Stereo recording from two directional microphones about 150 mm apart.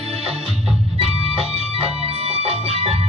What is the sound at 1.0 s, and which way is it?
Music, 40° right (ahead or behind).